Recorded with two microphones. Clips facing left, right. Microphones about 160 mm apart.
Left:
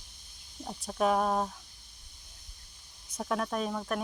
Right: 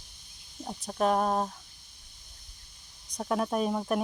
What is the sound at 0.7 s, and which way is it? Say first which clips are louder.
Speech: right 1 dB; centre (ahead or behind).